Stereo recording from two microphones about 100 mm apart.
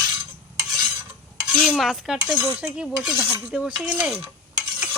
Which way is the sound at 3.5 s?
15° right (ahead or behind).